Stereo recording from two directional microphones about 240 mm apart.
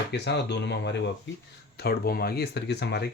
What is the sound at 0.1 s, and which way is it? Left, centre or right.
Speech, left.